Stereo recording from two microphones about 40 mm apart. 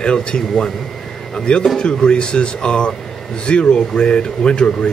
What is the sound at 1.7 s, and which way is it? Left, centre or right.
Speech, left.